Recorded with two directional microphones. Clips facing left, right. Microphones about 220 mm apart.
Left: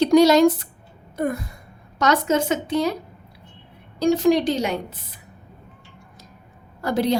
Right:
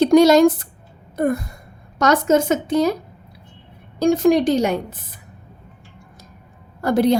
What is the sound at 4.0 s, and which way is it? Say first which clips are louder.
Speech: right 3 dB; 50° right (ahead or behind).